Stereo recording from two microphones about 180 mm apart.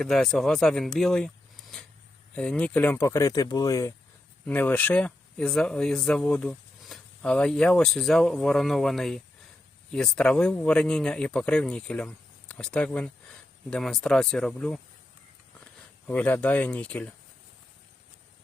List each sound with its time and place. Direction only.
0.0 s speech: centre (ahead or behind)